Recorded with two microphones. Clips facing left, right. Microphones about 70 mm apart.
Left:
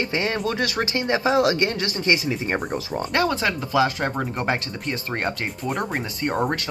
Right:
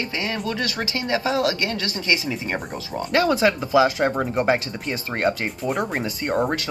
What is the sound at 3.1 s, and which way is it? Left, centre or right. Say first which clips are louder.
Speech: right 4 dB; centre.